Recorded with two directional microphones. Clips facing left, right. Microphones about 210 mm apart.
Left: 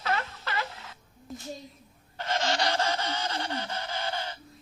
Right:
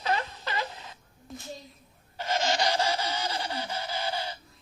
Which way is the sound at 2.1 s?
10° right (ahead or behind).